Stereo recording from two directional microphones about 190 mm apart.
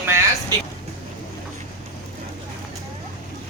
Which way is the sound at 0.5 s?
20° right (ahead or behind).